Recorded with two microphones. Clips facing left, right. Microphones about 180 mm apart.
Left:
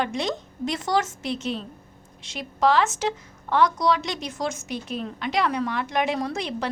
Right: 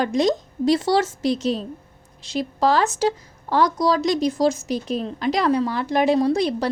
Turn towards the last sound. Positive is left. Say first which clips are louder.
# right 8 dB
turn(degrees=-35)  # may be behind; listen again after turning